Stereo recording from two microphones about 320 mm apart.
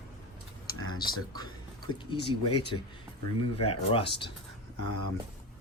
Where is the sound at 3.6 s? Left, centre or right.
Centre.